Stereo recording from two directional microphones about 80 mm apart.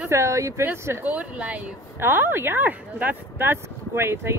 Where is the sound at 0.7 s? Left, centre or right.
Right.